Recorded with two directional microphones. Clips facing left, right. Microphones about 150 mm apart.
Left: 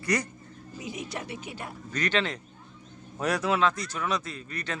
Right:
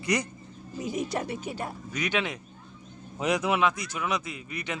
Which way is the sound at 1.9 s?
10° right (ahead or behind).